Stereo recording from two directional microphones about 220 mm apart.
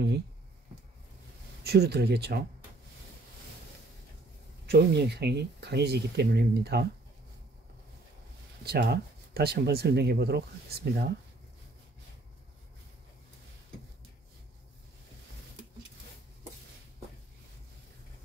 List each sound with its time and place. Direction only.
1.6 s speech: 45° right (ahead or behind)
4.6 s speech: 50° right (ahead or behind)
8.6 s speech: 45° right (ahead or behind)